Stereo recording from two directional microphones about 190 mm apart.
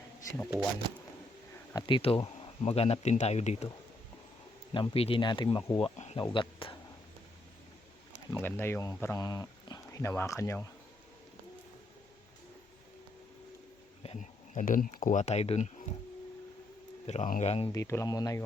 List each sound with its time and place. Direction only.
1.7 s speech: 30° left (ahead or behind)
4.7 s speech: 30° left (ahead or behind)
8.3 s speech: 10° left (ahead or behind)
14.0 s insect: 35° left (ahead or behind)
15.0 s speech: 40° left (ahead or behind)
17.1 s speech: 40° left (ahead or behind)
17.7 s speech: 15° left (ahead or behind)